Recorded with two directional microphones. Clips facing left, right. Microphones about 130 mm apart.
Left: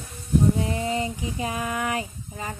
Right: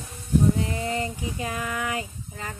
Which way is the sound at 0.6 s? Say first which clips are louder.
Left 2 dB; 25° left (ahead or behind).